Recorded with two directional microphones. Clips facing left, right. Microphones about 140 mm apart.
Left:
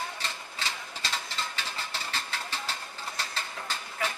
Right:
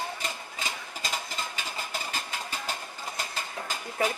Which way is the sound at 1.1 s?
10° right (ahead or behind).